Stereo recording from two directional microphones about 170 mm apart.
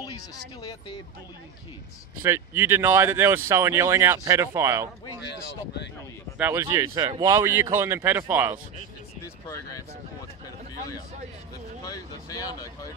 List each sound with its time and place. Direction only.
2.2 s speech: 15° right (ahead or behind)
6.3 s speech: 15° right (ahead or behind)
9.2 s speech: 20° left (ahead or behind)
11.8 s speech: 20° left (ahead or behind)